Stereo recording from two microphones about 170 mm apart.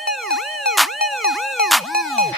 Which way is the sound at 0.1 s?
Centre (ahead or behind).